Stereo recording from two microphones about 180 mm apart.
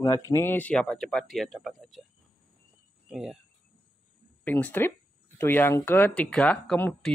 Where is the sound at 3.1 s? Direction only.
5° right (ahead or behind).